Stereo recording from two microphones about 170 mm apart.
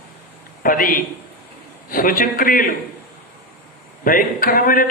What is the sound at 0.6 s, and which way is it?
A man's voice, 55° left (ahead or behind).